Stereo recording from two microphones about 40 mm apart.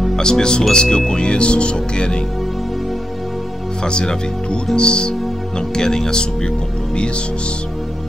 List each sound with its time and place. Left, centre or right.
0.1 s speech: centre
3.8 s speech: left